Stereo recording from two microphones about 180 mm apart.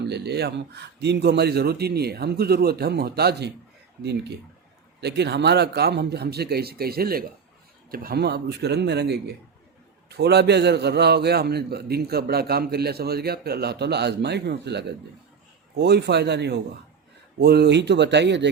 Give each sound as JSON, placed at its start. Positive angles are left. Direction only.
{"t": 0.0, "sound": "a man's voice", "side_deg": -65}